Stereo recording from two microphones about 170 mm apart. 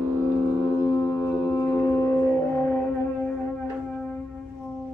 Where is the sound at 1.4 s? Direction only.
20° left (ahead or behind).